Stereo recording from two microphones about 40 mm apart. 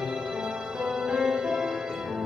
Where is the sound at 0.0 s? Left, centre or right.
Centre.